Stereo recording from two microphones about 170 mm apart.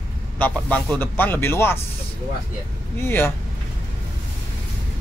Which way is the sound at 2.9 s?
15° left (ahead or behind).